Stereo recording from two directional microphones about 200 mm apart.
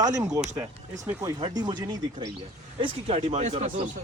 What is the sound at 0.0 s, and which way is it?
Speech, 20° right (ahead or behind).